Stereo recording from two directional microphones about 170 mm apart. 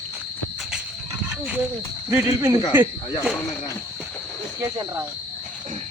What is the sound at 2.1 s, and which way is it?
Speech, 15° right (ahead or behind).